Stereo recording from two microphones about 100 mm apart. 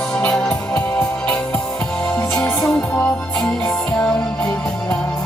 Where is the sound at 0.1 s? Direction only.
15° left (ahead or behind).